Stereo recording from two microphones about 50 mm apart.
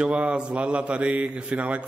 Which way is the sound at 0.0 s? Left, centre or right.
Right.